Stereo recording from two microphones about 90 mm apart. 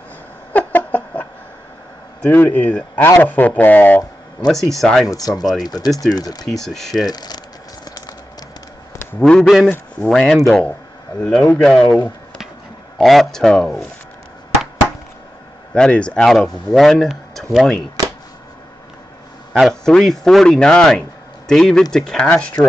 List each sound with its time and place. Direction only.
0.5 s a sound: 20° left (ahead or behind)
2.2 s speech: 20° left (ahead or behind)
4.5 s speech: 5° left (ahead or behind)
5.0 s speech: 40° left (ahead or behind)
5.4 s speech: centre (ahead or behind)
5.7 s speech: 45° left (ahead or behind)
6.4 s speech: 5° left (ahead or behind)
7.1 s a sound: 50° left (ahead or behind)
9.2 s speech: 5° left (ahead or behind)
15.7 s speech: 10° left (ahead or behind)
19.7 s speech: 5° left (ahead or behind)